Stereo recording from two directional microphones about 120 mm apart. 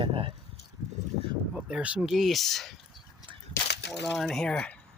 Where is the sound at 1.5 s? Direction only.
10° right (ahead or behind).